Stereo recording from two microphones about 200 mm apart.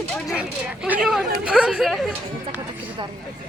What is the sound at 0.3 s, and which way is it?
Speech, 5° right (ahead or behind).